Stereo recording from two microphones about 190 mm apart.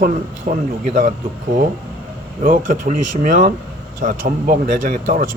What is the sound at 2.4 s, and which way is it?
Speech, 45° right (ahead or behind).